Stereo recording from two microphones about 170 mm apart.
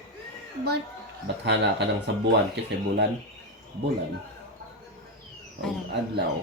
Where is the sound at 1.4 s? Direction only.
90° right.